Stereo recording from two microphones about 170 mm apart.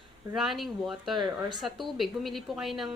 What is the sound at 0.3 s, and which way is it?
A woman's voice, centre (ahead or behind).